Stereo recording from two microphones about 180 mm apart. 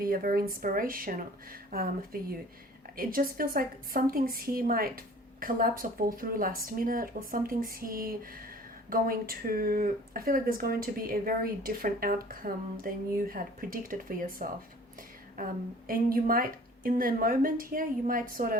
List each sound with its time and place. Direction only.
0.0 s speech: 50° right (ahead or behind)